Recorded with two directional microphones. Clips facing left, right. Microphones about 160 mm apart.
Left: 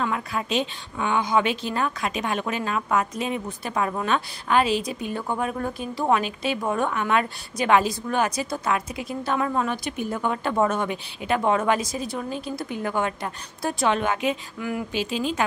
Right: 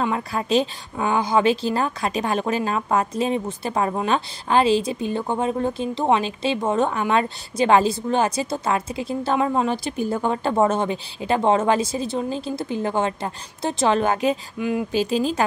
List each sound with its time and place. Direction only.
0.0 s a woman's voice: 30° right (ahead or behind)
14.6 s a woman's voice: 20° right (ahead or behind)
14.9 s speech: 40° right (ahead or behind)